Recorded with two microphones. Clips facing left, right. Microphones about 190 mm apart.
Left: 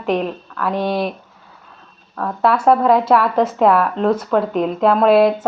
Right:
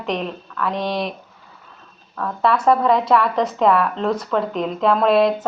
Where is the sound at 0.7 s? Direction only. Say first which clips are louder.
Left 5 dB; 5° left (ahead or behind).